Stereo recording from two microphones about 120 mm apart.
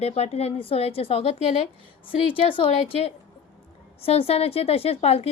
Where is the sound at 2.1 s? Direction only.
45° left (ahead or behind).